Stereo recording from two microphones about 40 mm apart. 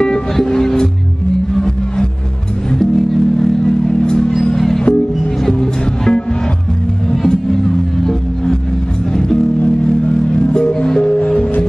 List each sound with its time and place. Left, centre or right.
0.0 s music: centre
9.8 s music: left